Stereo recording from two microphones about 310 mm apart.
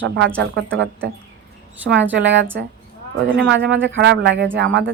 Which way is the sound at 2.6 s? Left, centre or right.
Right.